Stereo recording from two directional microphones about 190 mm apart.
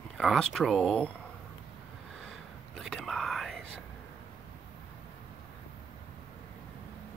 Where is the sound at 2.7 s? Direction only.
Centre (ahead or behind).